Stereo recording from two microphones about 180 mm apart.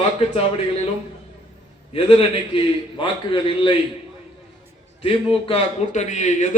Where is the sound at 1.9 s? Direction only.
30° left (ahead or behind).